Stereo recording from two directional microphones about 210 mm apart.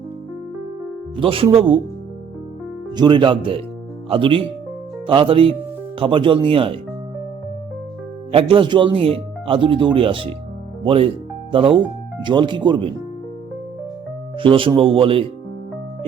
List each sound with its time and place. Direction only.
1.1 s speech: 25° right (ahead or behind)
2.9 s speech: 20° right (ahead or behind)
8.3 s speech: 25° right (ahead or behind)
14.3 s speech: 25° right (ahead or behind)